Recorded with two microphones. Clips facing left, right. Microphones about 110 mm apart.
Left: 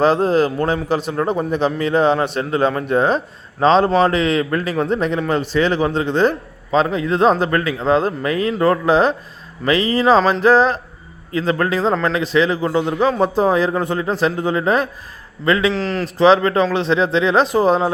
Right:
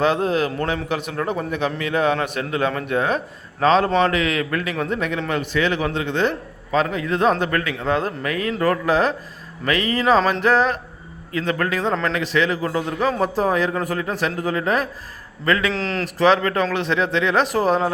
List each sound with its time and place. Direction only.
0.0 s a man's voice: 35° left (ahead or behind)
15.7 s speech: centre (ahead or behind)
16.1 s a man's voice: 25° left (ahead or behind)